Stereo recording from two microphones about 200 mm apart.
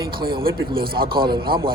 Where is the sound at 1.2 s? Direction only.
25° right (ahead or behind).